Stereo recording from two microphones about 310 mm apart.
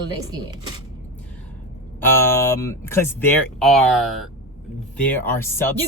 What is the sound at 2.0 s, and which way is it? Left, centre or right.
Speech, centre.